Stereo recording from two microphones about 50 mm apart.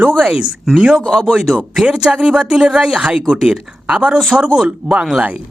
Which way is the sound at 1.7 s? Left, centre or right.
Centre.